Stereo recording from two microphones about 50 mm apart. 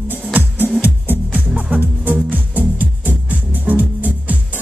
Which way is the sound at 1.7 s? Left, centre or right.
Right.